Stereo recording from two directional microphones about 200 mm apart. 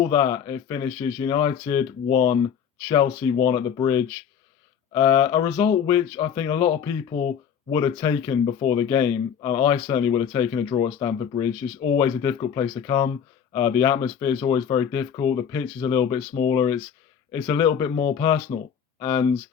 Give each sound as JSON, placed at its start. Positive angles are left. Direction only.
{"t": 0.0, "sound": "speech", "side_deg": 20}